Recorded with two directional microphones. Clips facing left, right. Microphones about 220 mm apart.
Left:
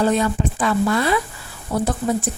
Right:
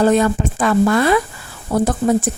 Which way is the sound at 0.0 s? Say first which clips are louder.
Right 4 dB; 50° right (ahead or behind).